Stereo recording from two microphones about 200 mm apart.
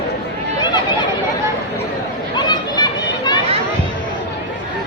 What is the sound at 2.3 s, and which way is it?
Chatter, 20° left (ahead or behind).